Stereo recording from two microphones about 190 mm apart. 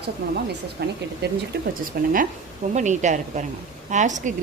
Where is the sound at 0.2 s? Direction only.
55° right (ahead or behind).